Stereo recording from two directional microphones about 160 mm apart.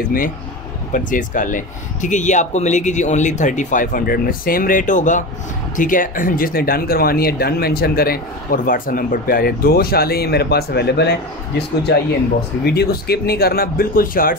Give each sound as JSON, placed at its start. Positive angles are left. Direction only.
{"t": 0.9, "sound": "speech", "side_deg": 55}